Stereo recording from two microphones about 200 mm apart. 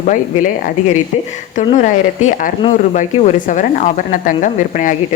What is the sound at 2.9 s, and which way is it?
Speech, 40° left (ahead or behind).